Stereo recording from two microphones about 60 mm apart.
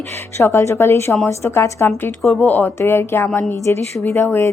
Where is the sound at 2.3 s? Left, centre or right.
Left.